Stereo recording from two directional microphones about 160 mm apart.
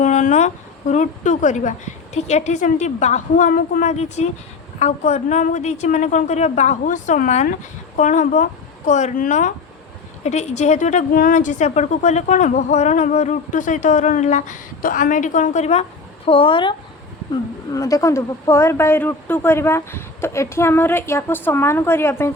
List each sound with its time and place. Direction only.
0.0 s a woman's voice: 50° left (ahead or behind); by 16.7 s 30° left (ahead or behind)
17.7 s a woman's voice: 20° left (ahead or behind)